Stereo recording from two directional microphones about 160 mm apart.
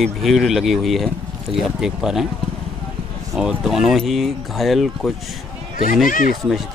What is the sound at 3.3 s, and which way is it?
Speech, centre (ahead or behind).